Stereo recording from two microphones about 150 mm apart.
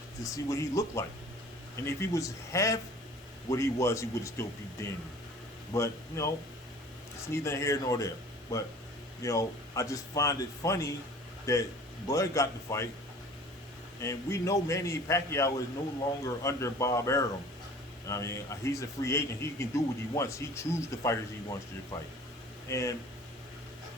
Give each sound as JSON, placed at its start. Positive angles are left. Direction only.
{"t": 0.2, "sound": "a man's voice", "side_deg": 20}
{"t": 5.7, "sound": "a man's voice", "side_deg": 20}
{"t": 7.3, "sound": "a man's voice", "side_deg": 20}
{"t": 14.0, "sound": "a man's voice", "side_deg": 20}
{"t": 22.7, "sound": "a man's voice", "side_deg": 20}